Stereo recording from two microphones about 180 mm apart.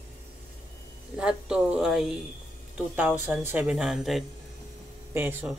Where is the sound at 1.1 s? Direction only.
5° right (ahead or behind).